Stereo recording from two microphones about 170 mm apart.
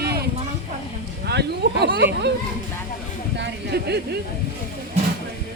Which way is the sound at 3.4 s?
75° right (ahead or behind).